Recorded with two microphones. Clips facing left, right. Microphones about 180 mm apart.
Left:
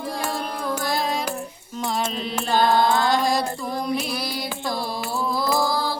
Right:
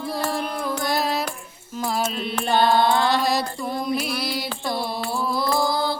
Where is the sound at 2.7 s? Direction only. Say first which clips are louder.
Even; 30° right (ahead or behind).